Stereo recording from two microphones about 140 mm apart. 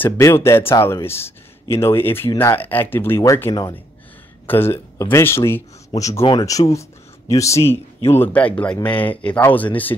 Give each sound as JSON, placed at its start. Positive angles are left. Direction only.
{"t": 0.0, "sound": "speech", "side_deg": 15}